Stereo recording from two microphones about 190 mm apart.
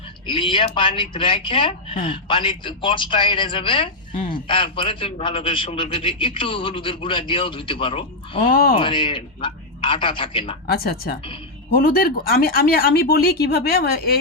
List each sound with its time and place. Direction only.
0.3 s speech: 25° left (ahead or behind)
8.4 s speech: 50° left (ahead or behind)
8.7 s speech: 25° left (ahead or behind)
10.7 s speech: 55° left (ahead or behind)